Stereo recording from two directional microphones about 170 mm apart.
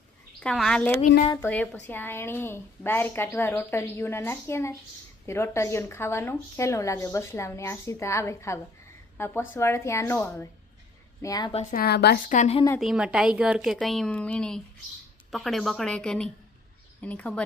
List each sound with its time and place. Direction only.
0.3 s a woman's voice: 5° left (ahead or behind); by 11.5 s 20° left (ahead or behind)
11.7 s a woman's voice: 65° left (ahead or behind)
12.3 s a woman's voice: 40° left (ahead or behind)
12.8 s a woman's voice: 5° right (ahead or behind)